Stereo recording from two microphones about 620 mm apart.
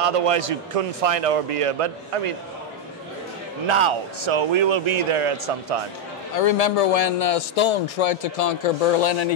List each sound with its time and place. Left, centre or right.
0.0 s a man's voice: right
3.6 s speech: right
6.3 s a man's voice: left